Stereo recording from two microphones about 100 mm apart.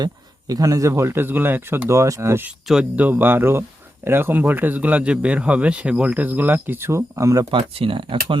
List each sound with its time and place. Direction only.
0.0 s a man's voice: 40° right (ahead or behind)
7.5 s speech: 60° right (ahead or behind)